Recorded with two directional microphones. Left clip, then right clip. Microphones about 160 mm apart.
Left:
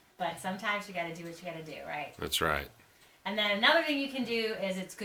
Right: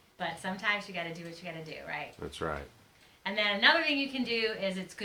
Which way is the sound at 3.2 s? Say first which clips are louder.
Right 1 dB; 15° right (ahead or behind).